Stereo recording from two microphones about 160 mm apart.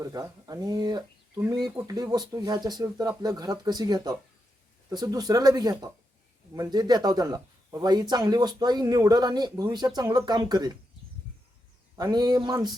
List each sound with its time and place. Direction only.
0.0 s speech: 25° right (ahead or behind)
11.9 s speech: 25° right (ahead or behind)